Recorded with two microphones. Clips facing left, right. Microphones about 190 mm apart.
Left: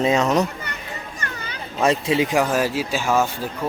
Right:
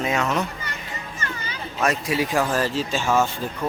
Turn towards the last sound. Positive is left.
turn(degrees=10)  # may be behind; listen again after turning